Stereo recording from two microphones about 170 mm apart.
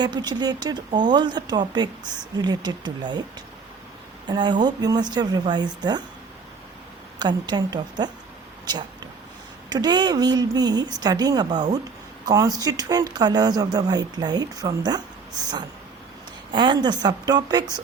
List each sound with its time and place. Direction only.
0.0 s speech: 25° right (ahead or behind)
4.3 s speech: 25° right (ahead or behind)
7.2 s speech: 25° right (ahead or behind)
9.6 s speech: 25° right (ahead or behind)
16.5 s speech: 25° right (ahead or behind)